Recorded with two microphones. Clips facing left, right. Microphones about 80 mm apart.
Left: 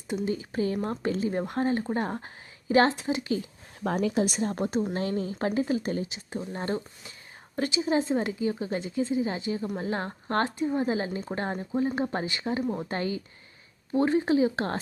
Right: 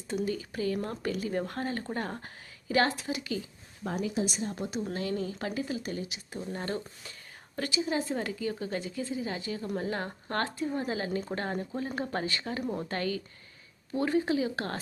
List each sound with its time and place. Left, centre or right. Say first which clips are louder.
0.3 s speech: left 3 dB; left
4.0 s speech: left 5 dB; left
12.6 s speech: left 3 dB; centre
12.9 s speech: left 2 dB; left